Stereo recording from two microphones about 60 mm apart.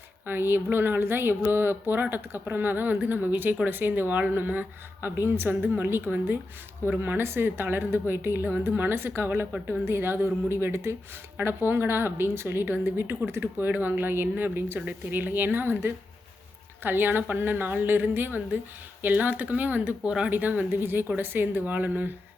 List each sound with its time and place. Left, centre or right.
0.3 s a woman's voice: right